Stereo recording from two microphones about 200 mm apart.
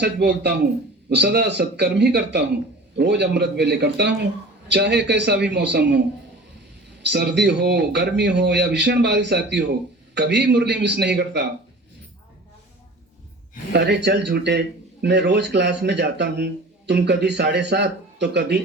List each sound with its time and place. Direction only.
0.0 s a man's voice: 55° right (ahead or behind)
7.0 s a man's voice: 55° right (ahead or behind)
13.7 s a man's voice: 55° right (ahead or behind)